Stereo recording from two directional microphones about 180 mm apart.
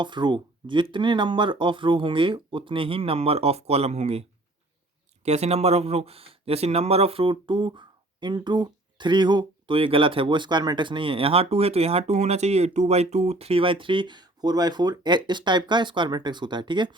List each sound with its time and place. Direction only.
0.0 s speech: 25° right (ahead or behind)
5.2 s speech: 35° right (ahead or behind)